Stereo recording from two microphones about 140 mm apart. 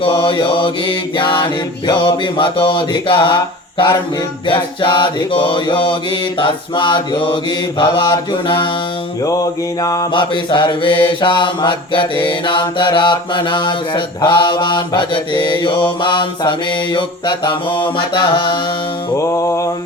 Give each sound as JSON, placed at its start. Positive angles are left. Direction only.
{"t": 0.0, "sound": "mantra", "side_deg": 40}
{"t": 9.8, "sound": "mantra", "side_deg": 25}
{"t": 19.1, "sound": "mantra", "side_deg": 20}